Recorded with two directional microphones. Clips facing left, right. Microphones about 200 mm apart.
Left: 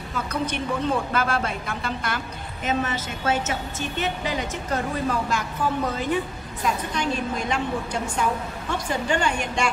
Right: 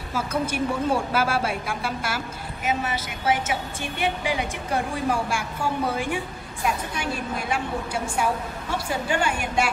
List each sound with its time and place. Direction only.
0.1 s a woman's voice: 5° right (ahead or behind)